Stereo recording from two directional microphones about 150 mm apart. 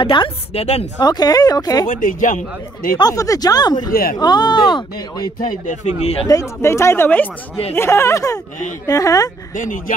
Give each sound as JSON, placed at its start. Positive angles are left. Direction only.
{"t": 0.0, "sound": "a woman's voice", "side_deg": 35}
{"t": 0.9, "sound": "speech", "side_deg": 25}
{"t": 1.9, "sound": "a man's voice", "side_deg": 60}
{"t": 3.0, "sound": "speech", "side_deg": 25}
{"t": 3.9, "sound": "speech", "side_deg": 80}
{"t": 4.2, "sound": "speech", "side_deg": 30}
{"t": 5.4, "sound": "speech", "side_deg": 50}
{"t": 6.2, "sound": "speech", "side_deg": 20}
{"t": 9.6, "sound": "a man's voice", "side_deg": 60}